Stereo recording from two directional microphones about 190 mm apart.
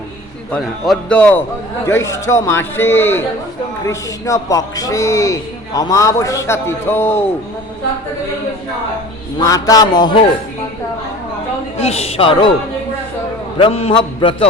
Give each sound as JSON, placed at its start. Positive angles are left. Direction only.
{"t": 0.5, "sound": "a man's voice", "side_deg": 5}
{"t": 9.4, "sound": "a man's voice", "side_deg": 20}
{"t": 11.8, "sound": "a woman's voice", "side_deg": 35}
{"t": 13.6, "sound": "a man's voice", "side_deg": 30}